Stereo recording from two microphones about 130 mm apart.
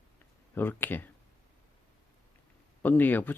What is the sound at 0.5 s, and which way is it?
Speech, 15° left (ahead or behind).